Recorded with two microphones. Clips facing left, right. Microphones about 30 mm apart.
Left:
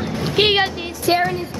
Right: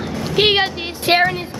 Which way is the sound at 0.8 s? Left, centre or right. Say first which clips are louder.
Right 3 dB; right.